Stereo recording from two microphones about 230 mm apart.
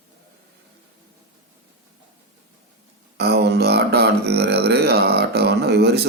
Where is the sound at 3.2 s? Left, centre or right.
Right.